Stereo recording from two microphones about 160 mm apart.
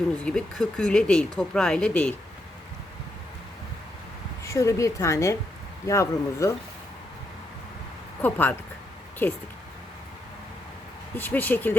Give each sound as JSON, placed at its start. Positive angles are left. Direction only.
{"t": 0.3, "sound": "speech", "side_deg": 5}
{"t": 4.4, "sound": "a woman's voice", "side_deg": 20}
{"t": 8.2, "sound": "speech", "side_deg": 10}
{"t": 11.2, "sound": "speech", "side_deg": 10}